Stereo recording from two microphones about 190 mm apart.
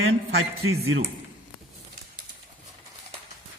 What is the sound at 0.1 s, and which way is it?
Speech, 90° right.